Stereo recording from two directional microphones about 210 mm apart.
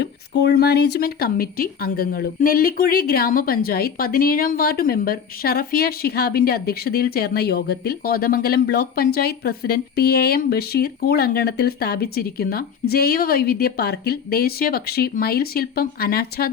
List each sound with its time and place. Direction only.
0.0 s speech: 55° left (ahead or behind)